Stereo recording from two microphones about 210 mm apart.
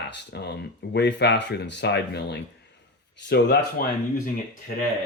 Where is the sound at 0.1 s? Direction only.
50° left (ahead or behind).